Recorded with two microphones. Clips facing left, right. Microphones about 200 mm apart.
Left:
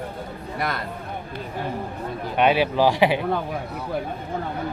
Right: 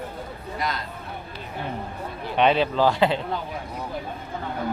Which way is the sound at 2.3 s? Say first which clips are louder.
Left 1 dB; 5° left (ahead or behind).